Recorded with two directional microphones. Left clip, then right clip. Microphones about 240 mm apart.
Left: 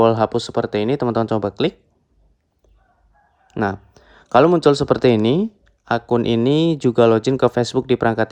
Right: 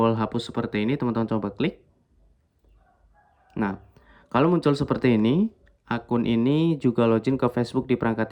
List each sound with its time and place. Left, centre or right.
0.0 s speech: centre
3.4 s speech: centre